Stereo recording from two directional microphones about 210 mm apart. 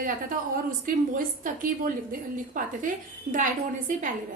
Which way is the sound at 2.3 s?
40° right (ahead or behind).